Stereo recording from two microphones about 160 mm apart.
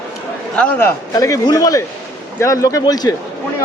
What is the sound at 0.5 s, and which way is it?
A man's voice, 10° left (ahead or behind).